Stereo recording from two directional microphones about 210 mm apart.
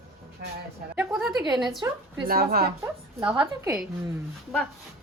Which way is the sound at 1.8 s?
15° right (ahead or behind).